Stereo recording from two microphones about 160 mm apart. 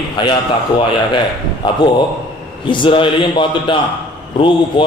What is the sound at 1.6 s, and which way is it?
A man's voice, 30° left (ahead or behind).